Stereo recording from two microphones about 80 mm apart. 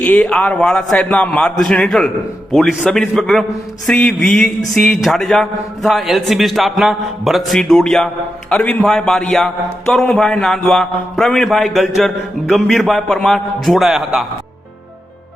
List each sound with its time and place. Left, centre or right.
0.0 s a man's voice: centre
3.8 s a man's voice: centre